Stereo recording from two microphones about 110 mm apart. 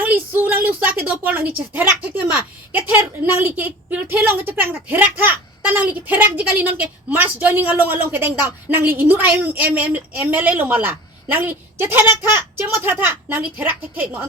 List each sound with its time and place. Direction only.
0.0 s a woman's voice: 15° right (ahead or behind)